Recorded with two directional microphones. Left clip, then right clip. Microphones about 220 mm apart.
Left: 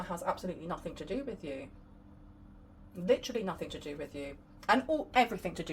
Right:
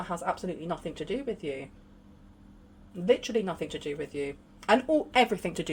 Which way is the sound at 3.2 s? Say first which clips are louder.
Right 6 dB; 50° right (ahead or behind).